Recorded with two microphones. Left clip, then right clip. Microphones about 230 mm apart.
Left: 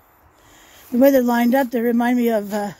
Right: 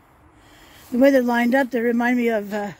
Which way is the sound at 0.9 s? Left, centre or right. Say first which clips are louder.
Left 2 dB; centre.